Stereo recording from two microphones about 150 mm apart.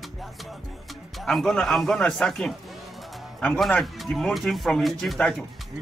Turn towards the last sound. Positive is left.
turn(degrees=5)  # may be behind; listen again after turning